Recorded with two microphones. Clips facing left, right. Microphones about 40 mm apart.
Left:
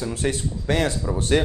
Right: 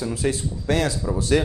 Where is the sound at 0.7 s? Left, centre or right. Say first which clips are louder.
Even; left.